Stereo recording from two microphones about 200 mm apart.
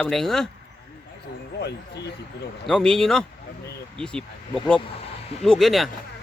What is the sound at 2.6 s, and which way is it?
Speech, 5° left (ahead or behind).